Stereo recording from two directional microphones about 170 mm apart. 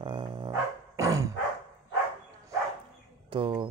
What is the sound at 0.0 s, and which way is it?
Dog, 30° right (ahead or behind).